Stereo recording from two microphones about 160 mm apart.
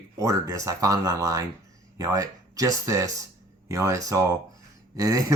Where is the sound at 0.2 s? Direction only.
20° right (ahead or behind).